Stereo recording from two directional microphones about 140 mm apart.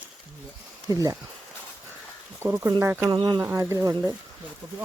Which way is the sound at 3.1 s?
30° right (ahead or behind).